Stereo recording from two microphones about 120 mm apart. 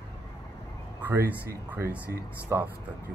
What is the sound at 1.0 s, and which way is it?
Speech, 20° right (ahead or behind).